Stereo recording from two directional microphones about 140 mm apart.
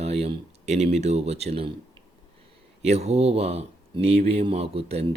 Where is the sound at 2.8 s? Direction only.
50° right (ahead or behind).